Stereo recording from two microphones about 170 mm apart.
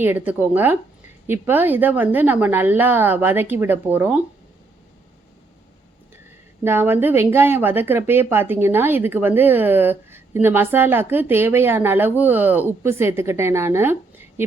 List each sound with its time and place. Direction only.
0.0 s a woman's voice: 10° right (ahead or behind)
6.7 s a woman's voice: 15° right (ahead or behind)